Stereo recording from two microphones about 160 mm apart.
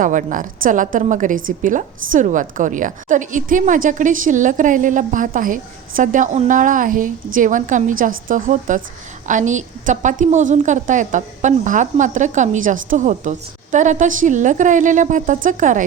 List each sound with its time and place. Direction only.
0.0 s a woman's voice: 55° right (ahead or behind)